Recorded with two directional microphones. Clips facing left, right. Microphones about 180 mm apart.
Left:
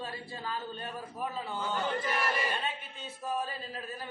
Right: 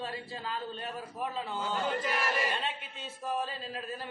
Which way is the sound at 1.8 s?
10° right (ahead or behind).